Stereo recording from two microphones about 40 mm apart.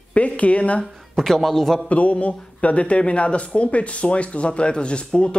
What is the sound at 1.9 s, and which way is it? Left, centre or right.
Speech, left.